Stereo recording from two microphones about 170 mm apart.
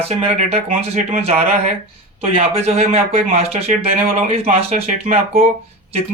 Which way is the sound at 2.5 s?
35° right (ahead or behind).